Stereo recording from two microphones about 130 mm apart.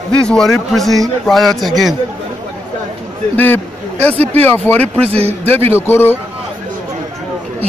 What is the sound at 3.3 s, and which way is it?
A man's voice, 15° left (ahead or behind).